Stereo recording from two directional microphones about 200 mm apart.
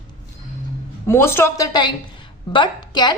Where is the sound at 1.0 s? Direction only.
10° left (ahead or behind).